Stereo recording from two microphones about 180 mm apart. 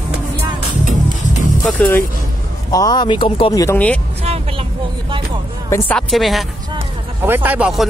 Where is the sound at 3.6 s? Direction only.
10° left (ahead or behind).